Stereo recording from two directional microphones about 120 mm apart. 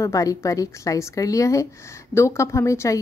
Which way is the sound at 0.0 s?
25° left (ahead or behind).